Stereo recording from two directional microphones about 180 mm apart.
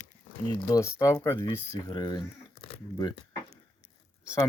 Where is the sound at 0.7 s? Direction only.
15° left (ahead or behind).